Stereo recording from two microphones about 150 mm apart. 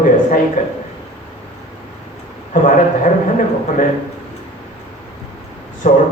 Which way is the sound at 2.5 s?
55° left (ahead or behind).